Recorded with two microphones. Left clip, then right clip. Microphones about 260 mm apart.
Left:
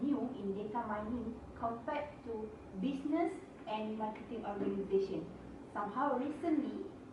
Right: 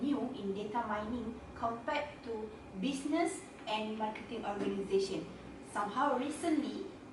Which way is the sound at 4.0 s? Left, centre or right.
Centre.